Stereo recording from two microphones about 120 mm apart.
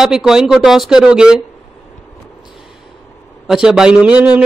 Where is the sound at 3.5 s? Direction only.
5° right (ahead or behind).